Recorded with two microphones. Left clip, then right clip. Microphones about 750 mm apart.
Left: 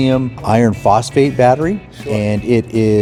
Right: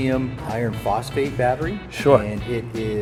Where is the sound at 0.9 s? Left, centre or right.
Left.